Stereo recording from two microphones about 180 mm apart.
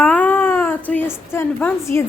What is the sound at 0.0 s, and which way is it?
Cat, 10° left (ahead or behind).